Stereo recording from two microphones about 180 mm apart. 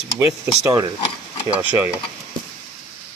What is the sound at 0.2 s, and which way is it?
Speech, 15° right (ahead or behind).